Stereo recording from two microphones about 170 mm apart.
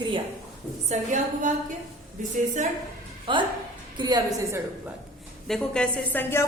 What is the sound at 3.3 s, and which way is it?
A woman's voice, 30° right (ahead or behind).